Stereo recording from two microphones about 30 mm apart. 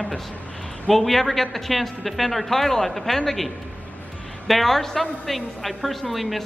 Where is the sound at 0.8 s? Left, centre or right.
Centre.